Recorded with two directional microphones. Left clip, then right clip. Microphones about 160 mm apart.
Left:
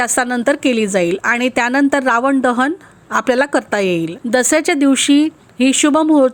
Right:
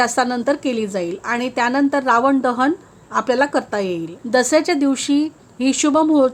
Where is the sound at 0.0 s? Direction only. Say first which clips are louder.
Left 2 dB; 20° left (ahead or behind).